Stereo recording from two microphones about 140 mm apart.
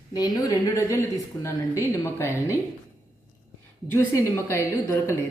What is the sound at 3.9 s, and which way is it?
A woman's voice, 20° left (ahead or behind).